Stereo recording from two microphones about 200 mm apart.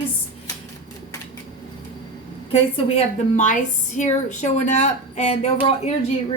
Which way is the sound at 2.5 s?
30° left (ahead or behind).